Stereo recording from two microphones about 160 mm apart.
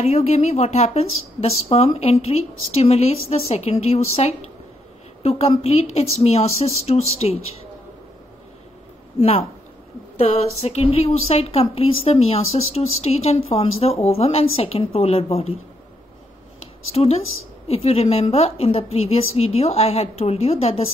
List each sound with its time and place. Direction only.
0.0 s speech: 40° left (ahead or behind)
10.1 s speech: 40° left (ahead or behind)
16.9 s speech: 40° left (ahead or behind)